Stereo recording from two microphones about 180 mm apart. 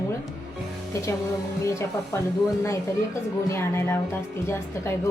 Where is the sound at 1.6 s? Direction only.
15° left (ahead or behind).